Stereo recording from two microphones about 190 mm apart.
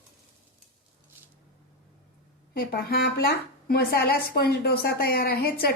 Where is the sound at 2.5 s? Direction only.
55° left (ahead or behind).